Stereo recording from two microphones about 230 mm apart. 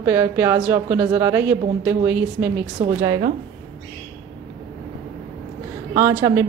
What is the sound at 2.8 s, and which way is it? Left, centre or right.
Speech, right.